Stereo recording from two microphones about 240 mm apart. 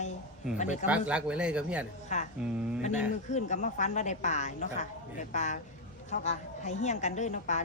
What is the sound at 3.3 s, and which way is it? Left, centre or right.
A woman's voice, left.